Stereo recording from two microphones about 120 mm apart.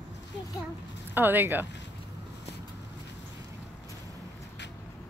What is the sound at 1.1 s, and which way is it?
Speech, 15° right (ahead or behind).